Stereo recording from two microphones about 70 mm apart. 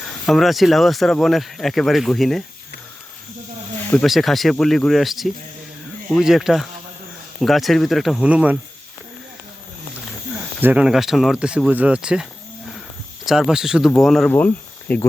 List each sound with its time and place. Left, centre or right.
0.0 s speech: centre
4.0 s speech: centre
8.2 s speech: centre
10.3 s snake: right
10.8 s speech: centre; by 11.9 s right
11.9 s speech: centre
14.0 s speech: centre
14.3 s speech: left